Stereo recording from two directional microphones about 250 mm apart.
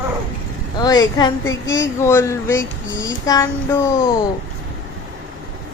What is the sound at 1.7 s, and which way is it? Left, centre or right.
Speech, centre.